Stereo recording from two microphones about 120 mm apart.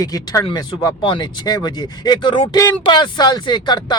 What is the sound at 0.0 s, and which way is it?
Speech, 30° left (ahead or behind).